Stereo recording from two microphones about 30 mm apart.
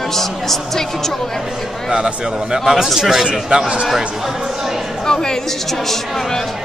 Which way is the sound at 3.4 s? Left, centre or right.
Right.